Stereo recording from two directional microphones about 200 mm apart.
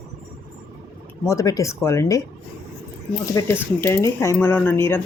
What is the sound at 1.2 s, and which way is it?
Speech, 15° left (ahead or behind).